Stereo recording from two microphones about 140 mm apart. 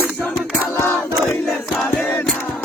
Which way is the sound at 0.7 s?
15° left (ahead or behind).